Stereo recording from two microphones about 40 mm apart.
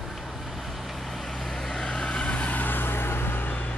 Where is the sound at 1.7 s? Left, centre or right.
Centre; by 3.4 s left.